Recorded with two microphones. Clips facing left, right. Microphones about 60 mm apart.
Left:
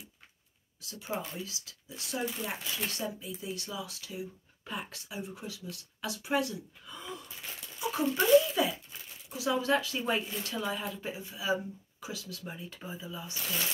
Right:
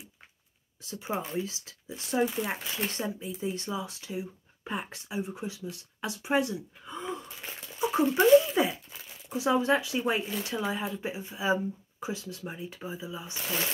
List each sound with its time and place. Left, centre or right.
0.8 s speech: right